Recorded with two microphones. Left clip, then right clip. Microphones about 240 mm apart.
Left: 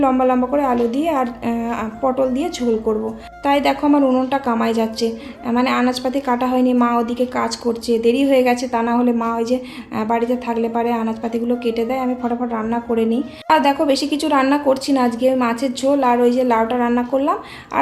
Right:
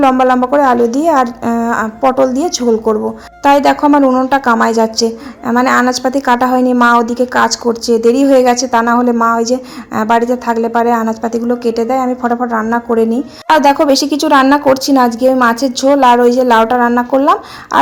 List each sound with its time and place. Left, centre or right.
0.0 s a woman's voice: right